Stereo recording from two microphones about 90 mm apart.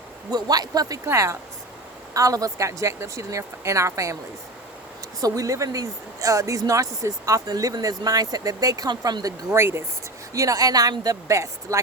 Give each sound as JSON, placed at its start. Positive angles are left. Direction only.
{"t": 0.3, "sound": "speech", "side_deg": -45}
{"t": 1.0, "sound": "speech", "side_deg": -30}
{"t": 5.2, "sound": "speech", "side_deg": -40}
{"t": 9.5, "sound": "speech", "side_deg": -30}